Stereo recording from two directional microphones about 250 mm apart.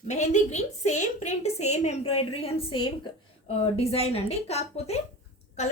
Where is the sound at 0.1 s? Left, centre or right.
Left.